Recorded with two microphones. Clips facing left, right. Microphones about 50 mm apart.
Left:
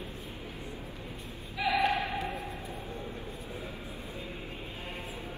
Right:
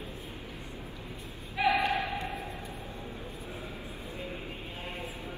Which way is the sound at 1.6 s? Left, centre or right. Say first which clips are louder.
Right 1 dB; right.